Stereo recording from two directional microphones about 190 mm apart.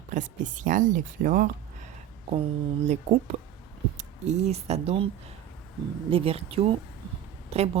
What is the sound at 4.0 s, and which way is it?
Speech, 35° right (ahead or behind).